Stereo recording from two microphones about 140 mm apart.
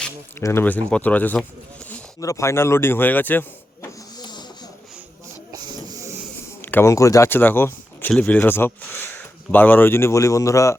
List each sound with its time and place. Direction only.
0.3 s speech: 20° left (ahead or behind)
3.8 s hiss: 30° left (ahead or behind)
5.5 s hiss: 30° right (ahead or behind)
6.6 s speech: 15° left (ahead or behind)